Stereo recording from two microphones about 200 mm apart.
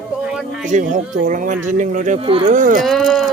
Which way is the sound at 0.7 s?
40° right (ahead or behind).